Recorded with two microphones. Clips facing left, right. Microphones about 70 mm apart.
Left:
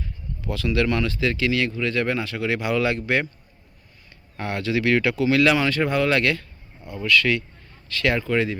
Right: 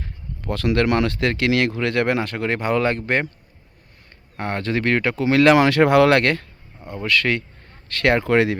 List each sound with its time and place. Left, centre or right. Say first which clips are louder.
0.0 s speech: right 1 dB; right
4.4 s speech: right 1 dB; right
5.5 s speech: right 7 dB; right